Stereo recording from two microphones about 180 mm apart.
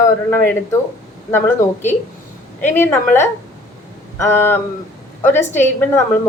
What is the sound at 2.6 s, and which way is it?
A woman's voice, 10° left (ahead or behind).